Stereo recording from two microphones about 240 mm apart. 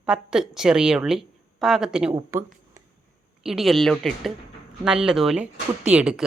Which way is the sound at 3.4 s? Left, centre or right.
Centre.